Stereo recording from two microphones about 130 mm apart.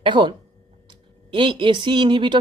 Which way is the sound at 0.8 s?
40° right (ahead or behind).